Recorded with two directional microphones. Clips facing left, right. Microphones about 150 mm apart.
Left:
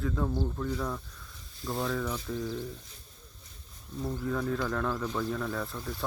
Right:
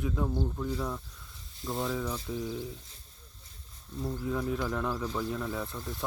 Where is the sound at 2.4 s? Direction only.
10° right (ahead or behind).